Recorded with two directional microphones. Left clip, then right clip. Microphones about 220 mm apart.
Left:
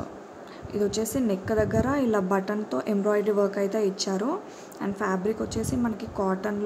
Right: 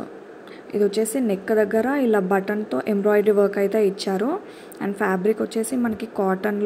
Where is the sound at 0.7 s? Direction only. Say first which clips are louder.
Right 6 dB; 5° right (ahead or behind).